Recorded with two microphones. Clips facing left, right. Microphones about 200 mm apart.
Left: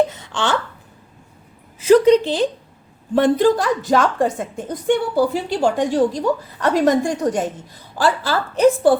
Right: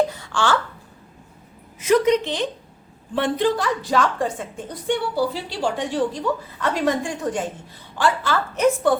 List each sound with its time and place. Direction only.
0.1 s wail: 20° left (ahead or behind)
1.8 s a woman's voice: 30° left (ahead or behind)